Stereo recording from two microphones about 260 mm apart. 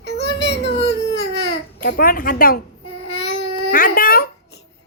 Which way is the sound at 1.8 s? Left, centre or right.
Left.